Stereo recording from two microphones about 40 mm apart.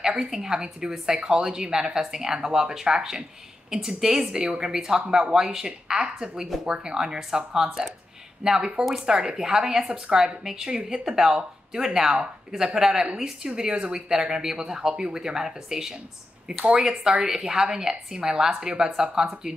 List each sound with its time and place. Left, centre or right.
0.0 s speech: centre